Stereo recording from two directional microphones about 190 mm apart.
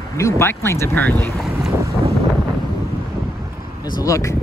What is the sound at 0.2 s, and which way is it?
Speech, 15° left (ahead or behind).